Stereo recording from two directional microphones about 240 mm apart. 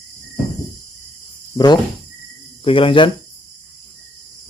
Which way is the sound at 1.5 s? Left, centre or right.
Centre.